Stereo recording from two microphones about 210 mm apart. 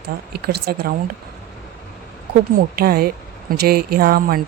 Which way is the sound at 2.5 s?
45° right (ahead or behind).